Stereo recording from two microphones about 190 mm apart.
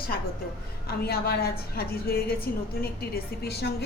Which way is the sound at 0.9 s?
55° left (ahead or behind).